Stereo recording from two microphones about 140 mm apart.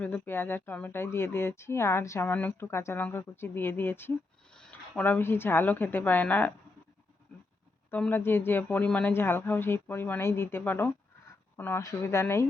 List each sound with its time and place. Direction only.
0.0 s a woman's voice: 15° left (ahead or behind)
7.9 s speech: 10° left (ahead or behind)